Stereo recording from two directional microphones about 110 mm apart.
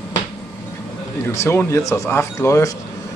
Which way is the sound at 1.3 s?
25° left (ahead or behind).